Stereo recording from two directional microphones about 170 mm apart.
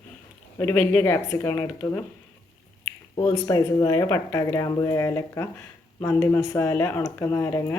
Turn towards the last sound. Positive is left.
turn(degrees=20)  # may be behind; listen again after turning